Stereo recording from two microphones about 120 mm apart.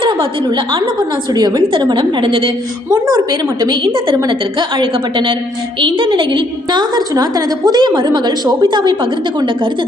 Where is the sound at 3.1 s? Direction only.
35° right (ahead or behind).